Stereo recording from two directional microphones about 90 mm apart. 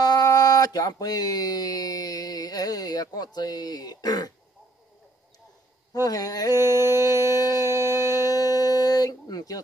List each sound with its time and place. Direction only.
0.0 s speech: 45° left (ahead or behind)
6.0 s speech: 45° left (ahead or behind)
6.5 s a sound: 30° right (ahead or behind)
7.2 s speech: 45° left (ahead or behind)
7.8 s a sound: 30° right (ahead or behind)
8.1 s music: 40° left (ahead or behind)